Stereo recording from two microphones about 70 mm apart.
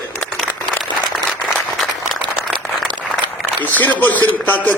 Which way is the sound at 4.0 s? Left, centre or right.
Left.